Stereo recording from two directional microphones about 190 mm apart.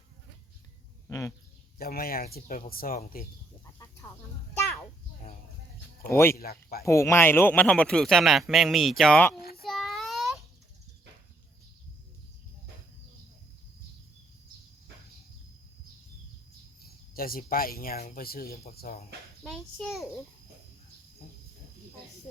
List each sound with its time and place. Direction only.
1.0 s a sound: 15° left (ahead or behind)
1.8 s speech: 50° left (ahead or behind)
6.1 s speech: 15° left (ahead or behind)
6.3 s speech: 50° left (ahead or behind)
6.8 s speech: 15° left (ahead or behind)
9.4 s a sound: 55° left (ahead or behind)
9.6 s child singing: centre (ahead or behind)
16.8 s speech: 50° left (ahead or behind)
19.4 s speech: centre (ahead or behind)